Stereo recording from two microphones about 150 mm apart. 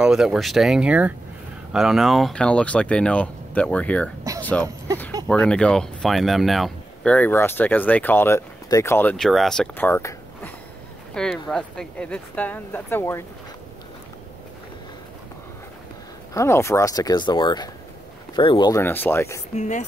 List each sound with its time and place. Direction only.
0.0 s speech: 5° right (ahead or behind)
4.4 s a sound: 10° left (ahead or behind)
5.3 s speech: 10° left (ahead or behind)
9.1 s speech: centre (ahead or behind)
9.8 s a sound: 15° left (ahead or behind)
11.1 s speech: 5° left (ahead or behind)
16.3 s speech: 20° left (ahead or behind)
18.7 s speech: 15° left (ahead or behind)
19.5 s speech: 50° left (ahead or behind)